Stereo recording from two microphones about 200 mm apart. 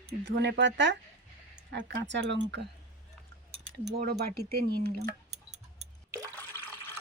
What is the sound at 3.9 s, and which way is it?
Speech, 50° right (ahead or behind).